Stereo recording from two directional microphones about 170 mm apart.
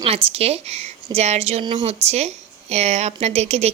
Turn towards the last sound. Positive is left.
turn(degrees=-40)  # may be behind; listen again after turning